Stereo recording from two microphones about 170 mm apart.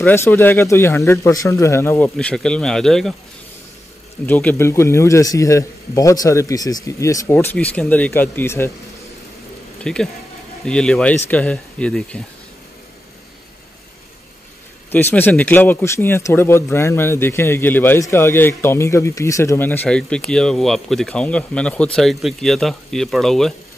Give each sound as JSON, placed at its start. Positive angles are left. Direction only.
{"t": 0.0, "sound": "a man's voice", "side_deg": 10}
{"t": 4.3, "sound": "a man's voice", "side_deg": 10}
{"t": 7.3, "sound": "a man's voice", "side_deg": 5}
{"t": 9.9, "sound": "a man's voice", "side_deg": 5}
{"t": 14.9, "sound": "a man's voice", "side_deg": 10}